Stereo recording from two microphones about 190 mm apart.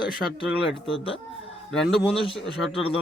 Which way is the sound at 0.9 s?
30° left (ahead or behind).